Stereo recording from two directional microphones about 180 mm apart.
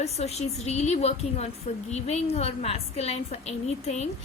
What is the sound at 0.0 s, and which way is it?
A woman's voice, 35° left (ahead or behind).